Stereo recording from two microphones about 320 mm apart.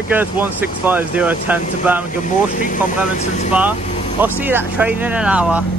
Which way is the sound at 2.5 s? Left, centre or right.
Left.